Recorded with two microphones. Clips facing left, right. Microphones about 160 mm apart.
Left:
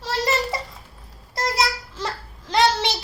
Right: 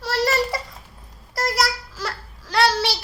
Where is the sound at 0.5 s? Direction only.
25° left (ahead or behind).